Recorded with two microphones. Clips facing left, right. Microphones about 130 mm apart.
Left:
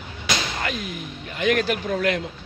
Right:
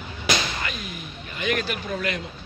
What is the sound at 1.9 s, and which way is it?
Speech, 65° left (ahead or behind).